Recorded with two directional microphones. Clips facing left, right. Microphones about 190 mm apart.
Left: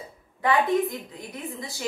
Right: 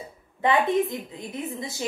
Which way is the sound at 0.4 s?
20° right (ahead or behind).